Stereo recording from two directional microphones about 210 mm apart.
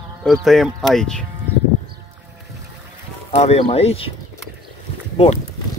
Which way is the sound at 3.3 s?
30° left (ahead or behind).